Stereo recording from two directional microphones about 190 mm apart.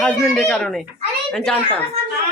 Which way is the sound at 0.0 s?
5° left (ahead or behind).